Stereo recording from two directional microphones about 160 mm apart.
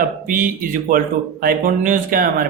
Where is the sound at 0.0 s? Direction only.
60° right (ahead or behind).